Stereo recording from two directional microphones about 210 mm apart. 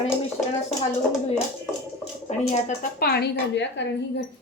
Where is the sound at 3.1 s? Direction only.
55° left (ahead or behind).